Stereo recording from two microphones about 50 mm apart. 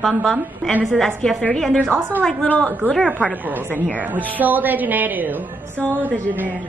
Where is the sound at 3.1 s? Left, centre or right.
Right.